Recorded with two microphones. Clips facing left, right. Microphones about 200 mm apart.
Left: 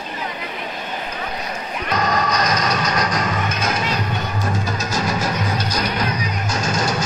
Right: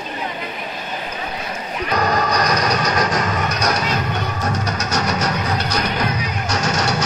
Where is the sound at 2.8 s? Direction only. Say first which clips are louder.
Right 2 dB; 45° right (ahead or behind).